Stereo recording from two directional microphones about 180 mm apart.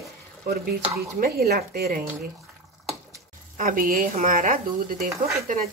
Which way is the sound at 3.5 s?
50° right (ahead or behind).